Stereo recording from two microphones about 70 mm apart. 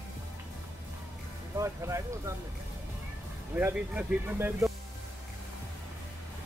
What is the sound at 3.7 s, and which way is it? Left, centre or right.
Speech, centre.